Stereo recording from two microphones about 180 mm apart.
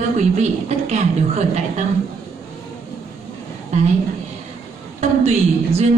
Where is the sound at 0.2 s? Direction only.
40° right (ahead or behind).